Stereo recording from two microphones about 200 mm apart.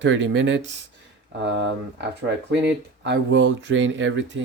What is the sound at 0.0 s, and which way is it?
Speech, 70° right (ahead or behind).